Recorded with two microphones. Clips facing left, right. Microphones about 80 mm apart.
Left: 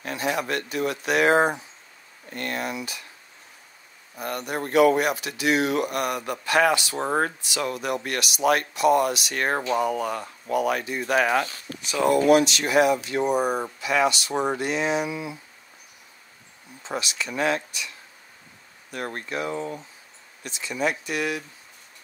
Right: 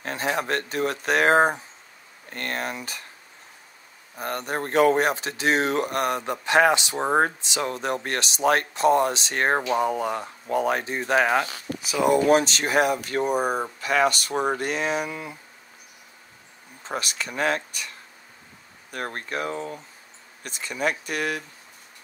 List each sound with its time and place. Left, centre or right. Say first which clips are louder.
0.0 s speech: even; right
4.2 s speech: right 1 dB; right
11.8 s speech: even; centre
12.3 s speech: left 1 dB; right
16.8 s speech: even; right
19.5 s speech: left 2 dB; left
20.4 s speech: even; right